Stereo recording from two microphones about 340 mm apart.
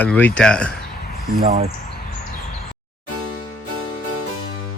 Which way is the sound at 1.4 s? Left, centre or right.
Centre.